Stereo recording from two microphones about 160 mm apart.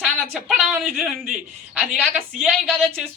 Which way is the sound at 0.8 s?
Centre (ahead or behind).